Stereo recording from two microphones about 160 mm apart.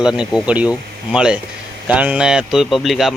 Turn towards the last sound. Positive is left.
turn(degrees=0)  # may be behind; listen again after turning